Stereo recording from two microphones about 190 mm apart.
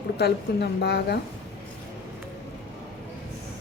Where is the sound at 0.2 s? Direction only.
60° left (ahead or behind).